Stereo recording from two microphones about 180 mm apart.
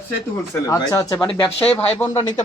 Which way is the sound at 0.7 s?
20° left (ahead or behind).